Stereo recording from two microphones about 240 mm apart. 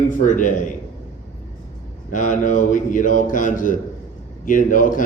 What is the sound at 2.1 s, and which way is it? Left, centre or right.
Speech, left.